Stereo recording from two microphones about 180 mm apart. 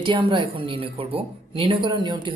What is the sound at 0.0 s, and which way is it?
A woman's voice, 25° right (ahead or behind).